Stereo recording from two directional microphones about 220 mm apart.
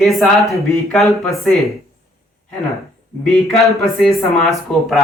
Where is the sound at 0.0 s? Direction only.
Centre (ahead or behind).